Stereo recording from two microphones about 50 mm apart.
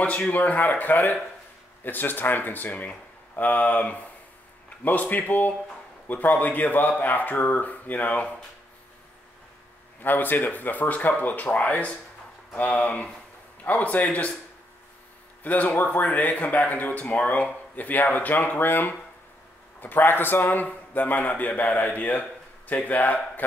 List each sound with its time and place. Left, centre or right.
0.0 s speech: left
2.7 s speech: left
3.3 s speech: left
10.0 s speech: left
15.4 s speech: left